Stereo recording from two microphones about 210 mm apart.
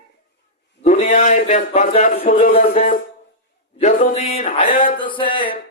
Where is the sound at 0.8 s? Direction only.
35° left (ahead or behind).